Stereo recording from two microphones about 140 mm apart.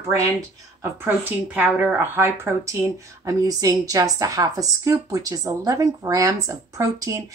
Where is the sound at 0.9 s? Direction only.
15° right (ahead or behind).